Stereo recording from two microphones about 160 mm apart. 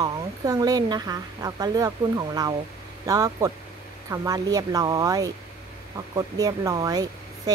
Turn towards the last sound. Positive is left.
turn(degrees=-25)  # may be behind; listen again after turning